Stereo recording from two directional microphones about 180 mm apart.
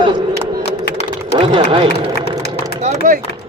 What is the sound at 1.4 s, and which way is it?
Speech, 30° right (ahead or behind).